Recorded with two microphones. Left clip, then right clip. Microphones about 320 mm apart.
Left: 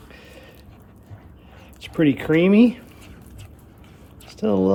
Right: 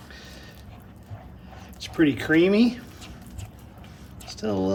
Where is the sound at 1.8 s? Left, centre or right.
Centre.